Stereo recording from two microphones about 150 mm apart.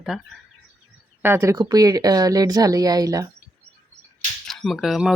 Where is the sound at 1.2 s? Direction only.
15° right (ahead or behind).